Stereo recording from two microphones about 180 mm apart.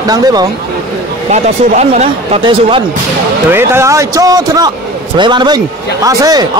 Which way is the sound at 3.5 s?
15° right (ahead or behind).